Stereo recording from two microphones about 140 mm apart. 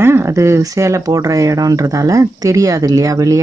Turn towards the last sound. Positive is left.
turn(degrees=-25)  # may be behind; listen again after turning